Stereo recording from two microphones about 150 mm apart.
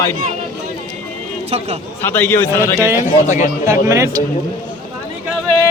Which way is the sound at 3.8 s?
20° right (ahead or behind).